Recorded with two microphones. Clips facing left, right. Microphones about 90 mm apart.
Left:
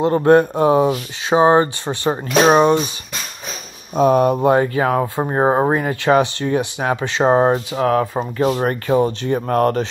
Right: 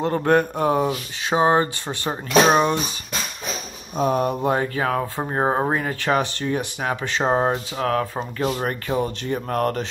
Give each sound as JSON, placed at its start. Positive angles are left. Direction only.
{"t": 0.2, "sound": "speech", "side_deg": 25}
{"t": 0.6, "sound": "speech", "side_deg": 15}
{"t": 0.8, "sound": "speech", "side_deg": 25}
{"t": 3.9, "sound": "speech", "side_deg": 75}
{"t": 4.5, "sound": "speech", "side_deg": 25}
{"t": 8.6, "sound": "speech", "side_deg": 40}